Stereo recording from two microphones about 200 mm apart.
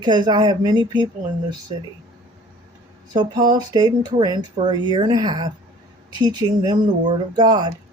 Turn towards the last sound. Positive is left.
turn(degrees=-20)  # may be behind; listen again after turning